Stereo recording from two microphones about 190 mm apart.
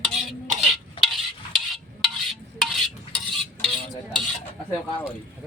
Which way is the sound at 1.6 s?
Centre (ahead or behind).